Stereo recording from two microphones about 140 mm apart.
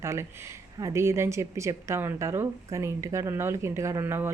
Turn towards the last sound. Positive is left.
turn(degrees=-15)  # may be behind; listen again after turning